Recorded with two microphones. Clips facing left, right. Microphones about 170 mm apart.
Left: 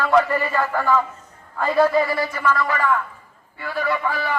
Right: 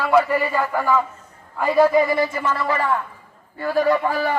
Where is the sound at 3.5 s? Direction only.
40° right (ahead or behind).